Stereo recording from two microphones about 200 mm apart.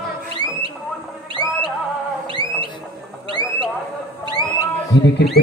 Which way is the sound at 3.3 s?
25° right (ahead or behind).